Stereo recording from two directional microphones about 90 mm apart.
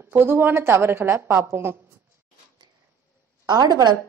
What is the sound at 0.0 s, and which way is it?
A woman's voice, 25° right (ahead or behind).